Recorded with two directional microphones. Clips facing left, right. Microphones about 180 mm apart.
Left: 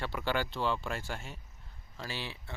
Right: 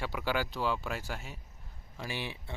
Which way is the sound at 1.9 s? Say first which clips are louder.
Right 2 dB; 15° right (ahead or behind).